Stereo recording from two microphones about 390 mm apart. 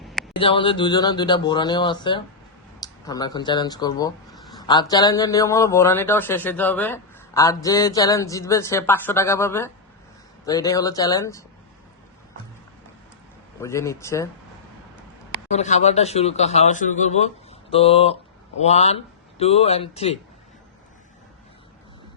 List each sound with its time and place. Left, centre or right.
0.0 s a sound: centre
0.3 s speech: centre
13.6 s speech: centre
15.4 s speech: centre